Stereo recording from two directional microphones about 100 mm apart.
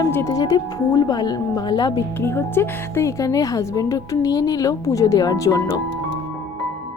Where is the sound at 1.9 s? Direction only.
25° left (ahead or behind).